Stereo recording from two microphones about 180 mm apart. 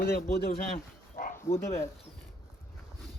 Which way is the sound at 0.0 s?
55° left (ahead or behind).